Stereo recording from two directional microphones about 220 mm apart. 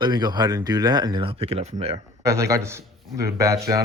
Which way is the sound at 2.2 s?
15° right (ahead or behind).